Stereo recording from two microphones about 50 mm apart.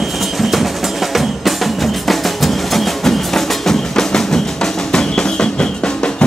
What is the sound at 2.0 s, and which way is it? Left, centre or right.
Music, centre.